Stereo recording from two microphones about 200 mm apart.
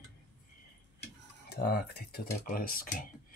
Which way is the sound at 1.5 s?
55° left (ahead or behind).